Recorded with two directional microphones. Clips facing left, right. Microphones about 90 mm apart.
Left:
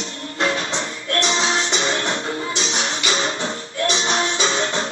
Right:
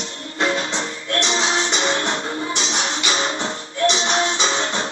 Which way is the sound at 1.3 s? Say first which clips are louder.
Even; 35° right (ahead or behind).